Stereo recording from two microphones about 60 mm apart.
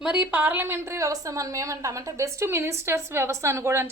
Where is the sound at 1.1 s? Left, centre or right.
Right.